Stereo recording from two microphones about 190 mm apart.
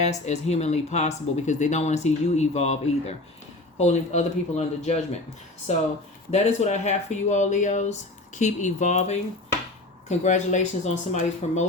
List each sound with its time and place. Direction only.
0.0 s speech: 35° left (ahead or behind)